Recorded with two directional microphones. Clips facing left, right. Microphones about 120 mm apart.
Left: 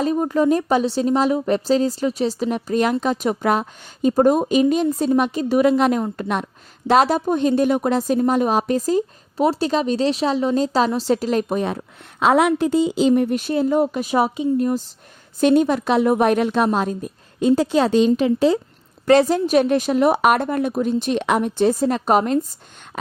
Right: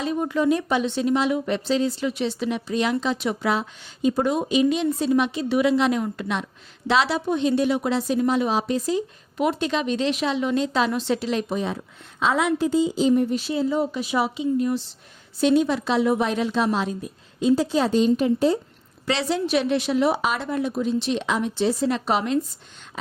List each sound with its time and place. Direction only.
0.0 s a woman's voice: 40° left (ahead or behind); by 18.6 s 90° left
19.0 s speech: 45° left (ahead or behind)